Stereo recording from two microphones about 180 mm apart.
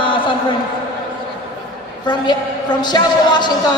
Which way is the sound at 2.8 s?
25° left (ahead or behind).